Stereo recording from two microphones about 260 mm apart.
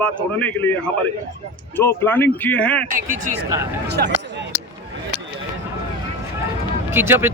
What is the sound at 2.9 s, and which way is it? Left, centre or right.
Speech, right.